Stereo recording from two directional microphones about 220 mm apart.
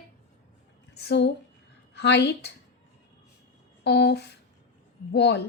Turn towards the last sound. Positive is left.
turn(degrees=50)  # may be behind; listen again after turning